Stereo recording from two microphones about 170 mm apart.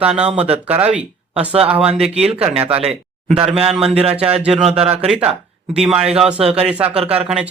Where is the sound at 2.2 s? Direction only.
35° right (ahead or behind).